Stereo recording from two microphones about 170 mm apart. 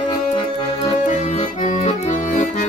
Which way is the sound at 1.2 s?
45° left (ahead or behind).